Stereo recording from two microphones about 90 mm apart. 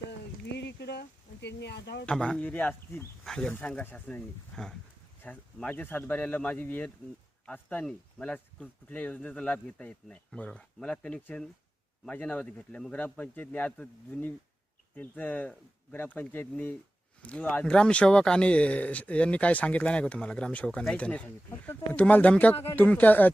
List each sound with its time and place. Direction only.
2.0 s speech: 5° left (ahead or behind)
2.4 s speech: 20° left (ahead or behind)
3.2 s speech: 5° left (ahead or behind); by 23.3 s 20° left (ahead or behind)